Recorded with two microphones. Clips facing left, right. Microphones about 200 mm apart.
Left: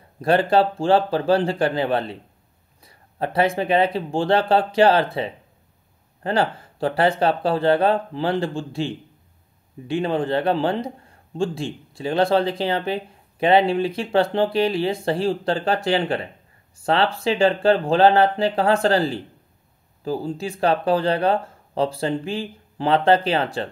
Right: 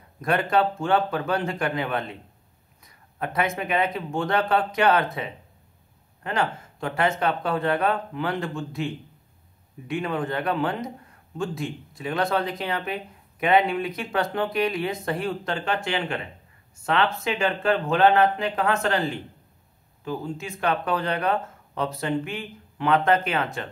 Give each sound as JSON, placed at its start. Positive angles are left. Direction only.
{"t": 0.2, "sound": "a man's voice", "side_deg": 30}